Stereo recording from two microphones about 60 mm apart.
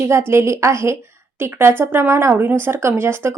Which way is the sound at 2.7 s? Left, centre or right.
Right.